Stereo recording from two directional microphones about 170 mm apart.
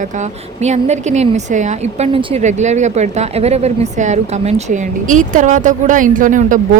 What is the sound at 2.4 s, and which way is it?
A woman's voice, 45° right (ahead or behind).